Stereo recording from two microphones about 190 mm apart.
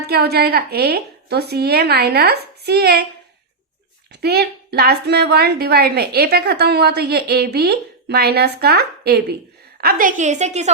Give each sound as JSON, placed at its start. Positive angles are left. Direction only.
{"t": 0.1, "sound": "a woman's voice", "side_deg": -55}
{"t": 4.1, "sound": "a woman's voice", "side_deg": -60}
{"t": 9.8, "sound": "a woman's voice", "side_deg": -45}